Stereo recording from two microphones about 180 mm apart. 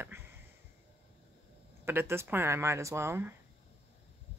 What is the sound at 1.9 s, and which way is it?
Speech, 10° right (ahead or behind).